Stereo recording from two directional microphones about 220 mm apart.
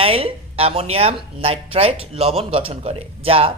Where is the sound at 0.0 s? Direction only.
25° right (ahead or behind).